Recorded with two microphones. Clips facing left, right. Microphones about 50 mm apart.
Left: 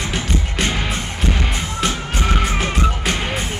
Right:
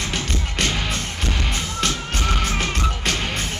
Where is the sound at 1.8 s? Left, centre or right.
Centre.